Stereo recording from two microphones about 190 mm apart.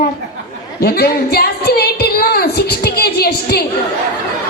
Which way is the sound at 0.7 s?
55° left (ahead or behind).